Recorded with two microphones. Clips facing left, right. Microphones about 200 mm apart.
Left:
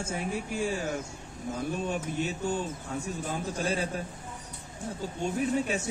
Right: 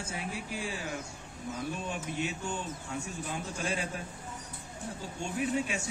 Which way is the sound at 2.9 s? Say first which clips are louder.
Left 3 dB; 35° left (ahead or behind).